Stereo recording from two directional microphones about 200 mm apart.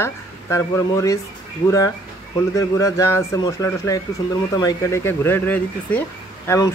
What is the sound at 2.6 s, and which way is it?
Speech, 15° left (ahead or behind).